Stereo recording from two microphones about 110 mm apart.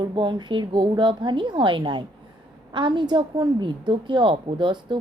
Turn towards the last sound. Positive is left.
turn(degrees=-45)  # may be behind; listen again after turning